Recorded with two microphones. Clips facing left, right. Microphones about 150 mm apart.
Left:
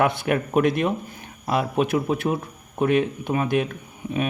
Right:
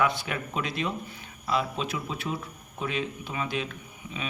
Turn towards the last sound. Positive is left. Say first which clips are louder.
# left 11 dB
turn(degrees=55)  # may be behind; listen again after turning